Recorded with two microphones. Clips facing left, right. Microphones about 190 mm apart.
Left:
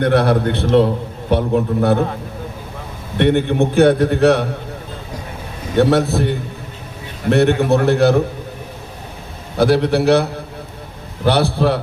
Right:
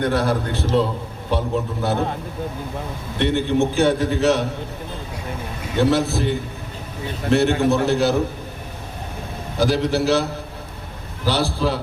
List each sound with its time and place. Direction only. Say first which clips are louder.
0.0 s a man's voice: left 6 dB; 65° left (ahead or behind)
3.2 s a man's voice: left 4 dB; 60° left (ahead or behind)
5.8 s a man's voice: left 3 dB; 60° left (ahead or behind)
9.6 s a man's voice: left 5 dB; 60° left (ahead or behind)
11.3 s a man's voice: left 6 dB; 60° left (ahead or behind)